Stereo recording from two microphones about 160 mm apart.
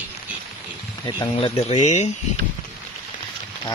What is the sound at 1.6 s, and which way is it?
Speech, 45° left (ahead or behind).